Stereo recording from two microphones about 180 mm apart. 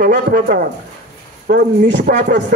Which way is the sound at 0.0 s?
55° right (ahead or behind).